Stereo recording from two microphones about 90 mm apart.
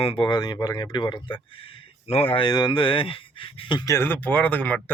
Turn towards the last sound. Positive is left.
turn(degrees=20)  # may be behind; listen again after turning